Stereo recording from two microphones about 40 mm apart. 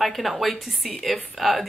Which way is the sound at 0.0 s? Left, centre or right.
Centre.